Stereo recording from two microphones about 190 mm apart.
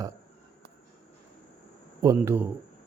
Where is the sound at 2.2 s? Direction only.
10° right (ahead or behind).